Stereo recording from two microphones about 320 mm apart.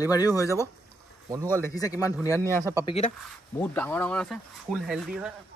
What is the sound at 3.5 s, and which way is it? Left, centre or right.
Speech, centre.